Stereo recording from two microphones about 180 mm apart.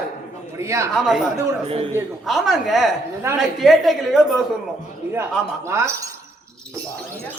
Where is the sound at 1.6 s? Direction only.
30° right (ahead or behind).